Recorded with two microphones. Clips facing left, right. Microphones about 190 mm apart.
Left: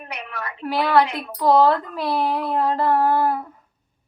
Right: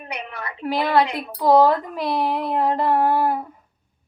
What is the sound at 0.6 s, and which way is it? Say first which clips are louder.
Speech: left 1 dB; 15° right (ahead or behind).